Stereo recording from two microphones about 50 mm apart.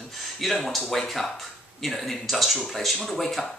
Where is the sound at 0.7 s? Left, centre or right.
Centre.